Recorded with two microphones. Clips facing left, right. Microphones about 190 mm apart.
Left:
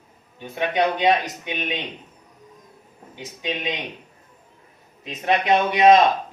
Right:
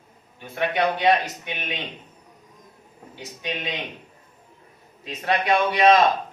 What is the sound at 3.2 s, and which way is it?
Speech, 15° left (ahead or behind).